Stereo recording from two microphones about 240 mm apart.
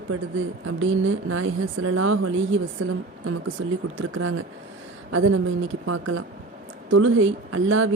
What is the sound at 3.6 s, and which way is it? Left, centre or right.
Speech, right.